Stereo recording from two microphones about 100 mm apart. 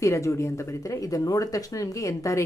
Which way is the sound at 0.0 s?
30° left (ahead or behind).